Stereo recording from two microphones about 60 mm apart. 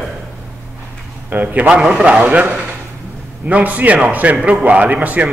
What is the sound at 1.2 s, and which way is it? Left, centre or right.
Speech, right.